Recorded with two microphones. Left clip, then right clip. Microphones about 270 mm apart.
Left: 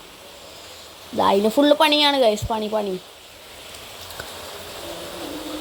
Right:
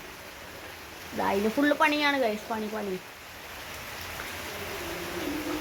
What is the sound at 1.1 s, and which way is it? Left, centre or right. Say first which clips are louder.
Speech: left 10 dB; left.